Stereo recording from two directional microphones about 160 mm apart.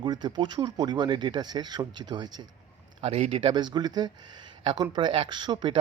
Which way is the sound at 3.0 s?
40° right (ahead or behind).